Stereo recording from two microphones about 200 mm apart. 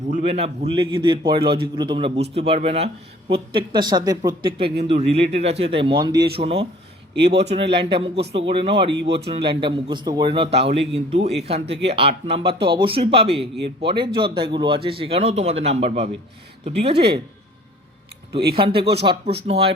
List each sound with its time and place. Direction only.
0.1 s speech: 30° right (ahead or behind)
7.2 s speech: 55° right (ahead or behind)
7.4 s speech: 30° right (ahead or behind)
8.9 s speech: 65° right (ahead or behind)
9.3 s speech: 25° right (ahead or behind)
12.5 s speech: 55° right (ahead or behind)
12.7 s speech: 25° right (ahead or behind)
18.5 s speech: 25° right (ahead or behind)